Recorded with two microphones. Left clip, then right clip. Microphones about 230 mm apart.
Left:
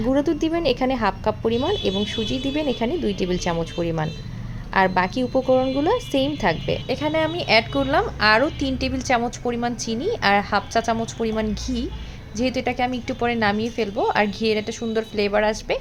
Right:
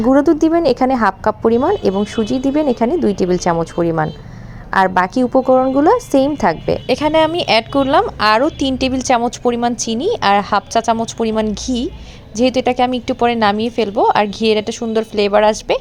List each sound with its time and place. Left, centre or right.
0.2 s a woman's voice: right